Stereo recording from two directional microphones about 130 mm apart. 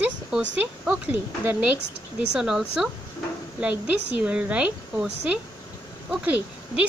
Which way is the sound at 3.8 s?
10° right (ahead or behind).